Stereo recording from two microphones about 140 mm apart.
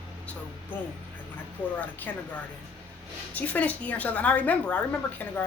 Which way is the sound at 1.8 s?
10° left (ahead or behind).